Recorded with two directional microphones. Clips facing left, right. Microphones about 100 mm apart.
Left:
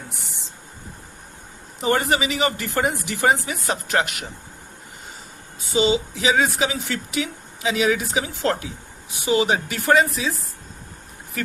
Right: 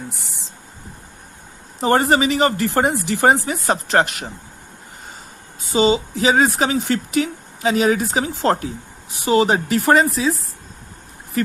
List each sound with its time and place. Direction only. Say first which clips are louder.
1.8 s speech: right 5 dB; 40° right (ahead or behind)
5.7 s speech: right 3 dB; 45° right (ahead or behind)